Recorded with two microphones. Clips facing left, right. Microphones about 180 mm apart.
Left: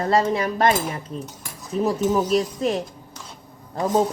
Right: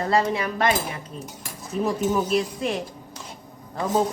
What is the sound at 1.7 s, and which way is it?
A woman's voice, 35° left (ahead or behind).